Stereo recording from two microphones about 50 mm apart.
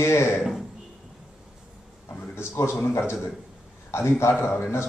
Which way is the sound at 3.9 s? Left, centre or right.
Left.